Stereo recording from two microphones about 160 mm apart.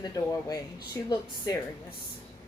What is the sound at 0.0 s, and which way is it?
Speech, 25° left (ahead or behind).